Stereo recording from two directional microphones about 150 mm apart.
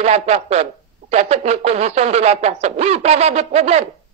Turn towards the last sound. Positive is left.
turn(degrees=-50)  # may be behind; listen again after turning